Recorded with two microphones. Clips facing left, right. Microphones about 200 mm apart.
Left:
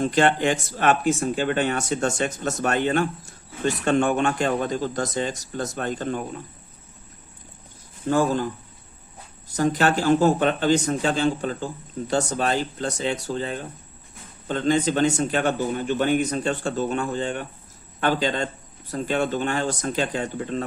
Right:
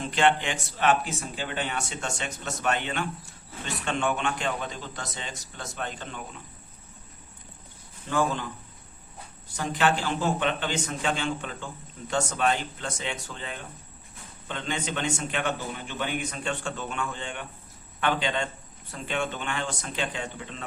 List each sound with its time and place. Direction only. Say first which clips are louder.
0.0 s speech: left 5 dB; 45° left (ahead or behind)
8.0 s speech: left 6 dB; 40° left (ahead or behind)
9.5 s speech: left 5 dB; 40° left (ahead or behind)